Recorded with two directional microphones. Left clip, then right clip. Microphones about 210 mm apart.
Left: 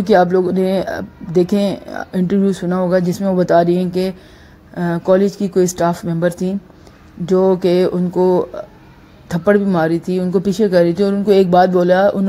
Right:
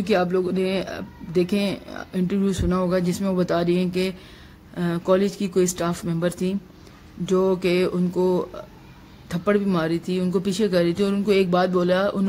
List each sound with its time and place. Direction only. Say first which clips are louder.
0.0 s speech: left 9 dB; 10° left (ahead or behind)
9.3 s speech: left 8 dB; 10° left (ahead or behind)